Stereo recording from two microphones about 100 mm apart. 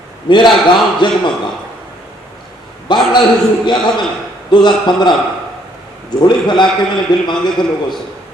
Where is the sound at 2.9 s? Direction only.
50° left (ahead or behind).